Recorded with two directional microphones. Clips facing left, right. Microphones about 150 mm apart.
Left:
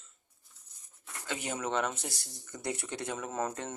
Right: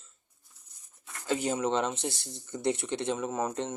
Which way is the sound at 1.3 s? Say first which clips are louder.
Right 6 dB; 35° right (ahead or behind).